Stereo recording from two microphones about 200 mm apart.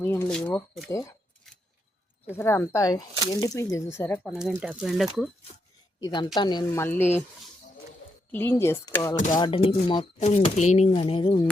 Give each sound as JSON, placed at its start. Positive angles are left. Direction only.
{"t": 0.0, "sound": "speech", "side_deg": 10}
{"t": 2.3, "sound": "speech", "side_deg": 15}
{"t": 4.3, "sound": "speech", "side_deg": -5}
{"t": 6.0, "sound": "speech", "side_deg": 20}
{"t": 6.8, "sound": "speech", "side_deg": 10}
{"t": 8.3, "sound": "speech", "side_deg": 10}
{"t": 9.3, "sound": "speech", "side_deg": 25}